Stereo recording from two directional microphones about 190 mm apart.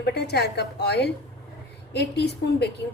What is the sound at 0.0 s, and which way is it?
A woman's voice, 60° left (ahead or behind).